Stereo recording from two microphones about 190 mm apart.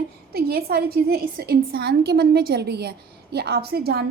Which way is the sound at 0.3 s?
55° right (ahead or behind).